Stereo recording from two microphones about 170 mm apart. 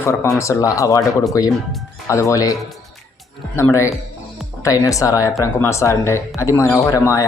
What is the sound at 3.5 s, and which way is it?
Speech, 15° left (ahead or behind).